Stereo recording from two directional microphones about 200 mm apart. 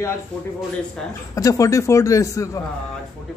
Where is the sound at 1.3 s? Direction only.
15° left (ahead or behind).